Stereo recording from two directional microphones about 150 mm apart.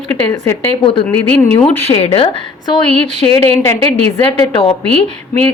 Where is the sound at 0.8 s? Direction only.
35° left (ahead or behind).